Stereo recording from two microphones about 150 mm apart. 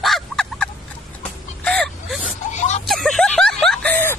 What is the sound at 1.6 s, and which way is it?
Whimper, 5° left (ahead or behind).